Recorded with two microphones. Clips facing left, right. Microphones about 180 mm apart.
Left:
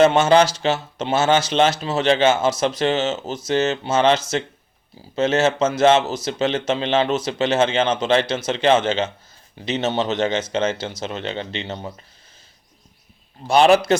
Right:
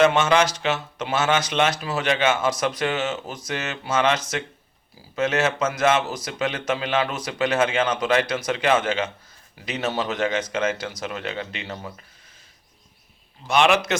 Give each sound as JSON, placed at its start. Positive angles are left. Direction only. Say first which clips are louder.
{"t": 0.0, "sound": "speech", "louder": "left 4 dB", "side_deg": 30}
{"t": 13.5, "sound": "a man's voice", "louder": "left 5 dB", "side_deg": 35}